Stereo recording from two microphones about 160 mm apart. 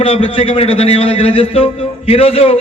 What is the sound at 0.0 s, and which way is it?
A man's voice, 35° left (ahead or behind).